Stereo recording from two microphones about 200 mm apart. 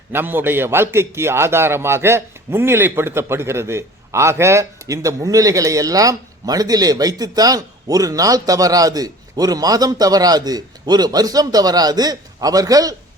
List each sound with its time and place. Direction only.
0.1 s a man's voice: 10° right (ahead or behind)